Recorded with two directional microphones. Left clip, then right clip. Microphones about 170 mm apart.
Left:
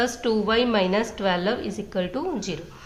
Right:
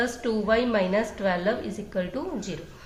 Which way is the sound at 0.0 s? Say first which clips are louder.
Left 3 dB; 30° left (ahead or behind).